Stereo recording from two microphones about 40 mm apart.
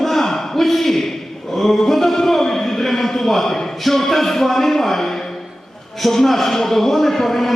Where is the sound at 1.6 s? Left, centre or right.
Centre.